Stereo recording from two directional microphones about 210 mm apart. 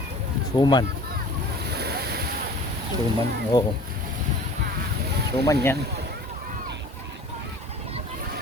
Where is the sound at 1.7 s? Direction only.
50° right (ahead or behind).